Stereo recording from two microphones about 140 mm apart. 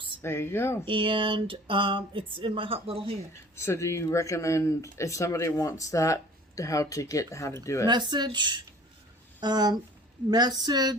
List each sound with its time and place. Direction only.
0.2 s speech: 15° left (ahead or behind)
0.9 s speech: 35° right (ahead or behind)
3.5 s speech: 20° left (ahead or behind)
7.9 s a woman's voice: 30° right (ahead or behind)